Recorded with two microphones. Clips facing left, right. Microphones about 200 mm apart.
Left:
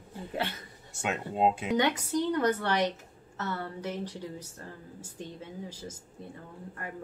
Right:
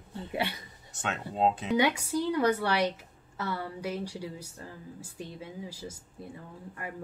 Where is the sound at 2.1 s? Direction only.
10° right (ahead or behind).